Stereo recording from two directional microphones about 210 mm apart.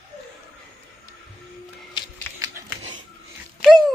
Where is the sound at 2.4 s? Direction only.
15° right (ahead or behind).